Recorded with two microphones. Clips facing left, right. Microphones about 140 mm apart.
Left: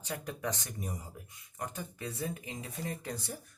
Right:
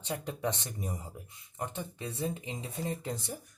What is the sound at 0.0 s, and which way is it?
Speech, 25° right (ahead or behind).